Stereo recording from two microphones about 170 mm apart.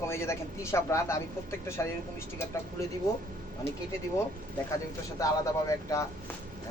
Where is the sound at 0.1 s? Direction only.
15° left (ahead or behind).